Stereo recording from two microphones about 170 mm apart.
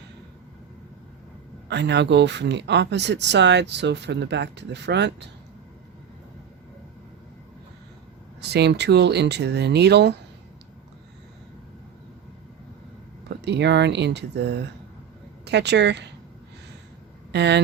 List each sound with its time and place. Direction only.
1.6 s speech: 90° right
8.4 s speech: 75° right (ahead or behind)
13.2 s speech: 85° right
17.3 s speech: 85° right